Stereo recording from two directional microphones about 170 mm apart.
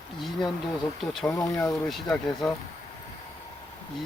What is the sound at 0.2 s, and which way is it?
Speech, centre (ahead or behind).